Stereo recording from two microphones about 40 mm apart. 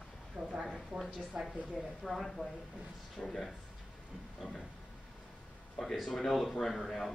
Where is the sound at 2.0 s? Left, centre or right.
Centre.